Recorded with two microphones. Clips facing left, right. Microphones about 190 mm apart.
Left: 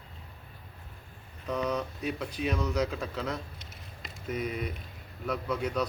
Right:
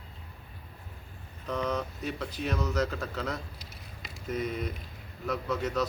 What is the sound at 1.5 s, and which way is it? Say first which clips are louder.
Speech: left 1 dB; 10° left (ahead or behind).